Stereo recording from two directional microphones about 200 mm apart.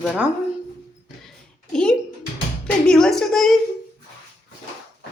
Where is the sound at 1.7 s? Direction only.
5° left (ahead or behind).